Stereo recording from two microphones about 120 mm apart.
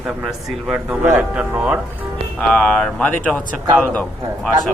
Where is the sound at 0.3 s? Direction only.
5° right (ahead or behind).